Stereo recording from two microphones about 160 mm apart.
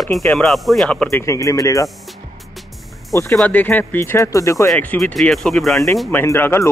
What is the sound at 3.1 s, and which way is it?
Speech, 15° left (ahead or behind).